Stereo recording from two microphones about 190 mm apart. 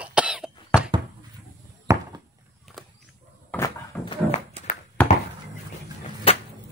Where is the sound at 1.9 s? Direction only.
15° right (ahead or behind).